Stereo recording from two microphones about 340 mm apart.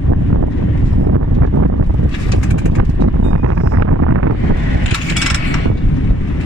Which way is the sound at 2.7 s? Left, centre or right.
Right.